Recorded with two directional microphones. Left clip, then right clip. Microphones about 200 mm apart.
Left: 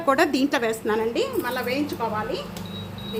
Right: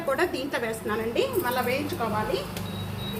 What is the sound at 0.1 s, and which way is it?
Speech, 60° left (ahead or behind).